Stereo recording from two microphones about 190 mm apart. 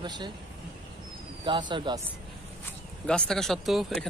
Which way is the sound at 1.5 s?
25° right (ahead or behind).